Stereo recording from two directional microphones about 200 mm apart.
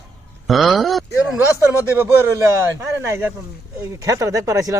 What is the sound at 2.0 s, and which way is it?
Speech, 10° right (ahead or behind).